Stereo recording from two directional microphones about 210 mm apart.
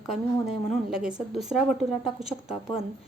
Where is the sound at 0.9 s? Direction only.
5° right (ahead or behind).